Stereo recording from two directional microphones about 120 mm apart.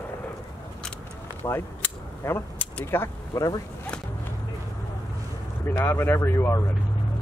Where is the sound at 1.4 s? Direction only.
20° left (ahead or behind).